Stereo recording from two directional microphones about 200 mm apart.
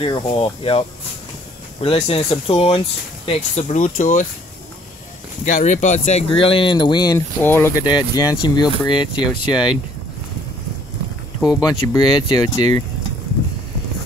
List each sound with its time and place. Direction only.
0.0 s speech: 25° left (ahead or behind)
5.4 s speech: 35° left (ahead or behind)
9.5 s speech: 5° right (ahead or behind)
11.6 s speech: 20° left (ahead or behind)